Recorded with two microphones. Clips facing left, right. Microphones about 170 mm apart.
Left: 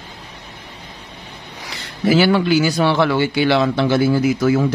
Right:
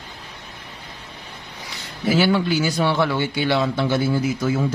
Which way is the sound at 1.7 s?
85° left.